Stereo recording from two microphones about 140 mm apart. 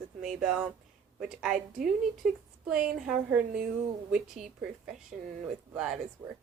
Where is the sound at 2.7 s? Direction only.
5° right (ahead or behind).